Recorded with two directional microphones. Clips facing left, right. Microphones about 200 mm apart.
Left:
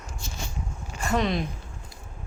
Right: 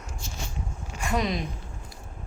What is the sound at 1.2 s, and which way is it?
Speech, centre (ahead or behind).